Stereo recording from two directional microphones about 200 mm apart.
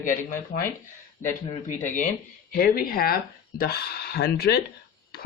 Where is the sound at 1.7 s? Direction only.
40° left (ahead or behind).